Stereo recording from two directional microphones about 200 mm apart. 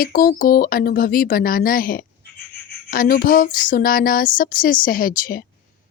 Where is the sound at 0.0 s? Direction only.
45° left (ahead or behind).